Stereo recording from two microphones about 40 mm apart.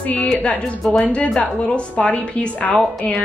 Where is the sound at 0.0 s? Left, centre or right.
Left.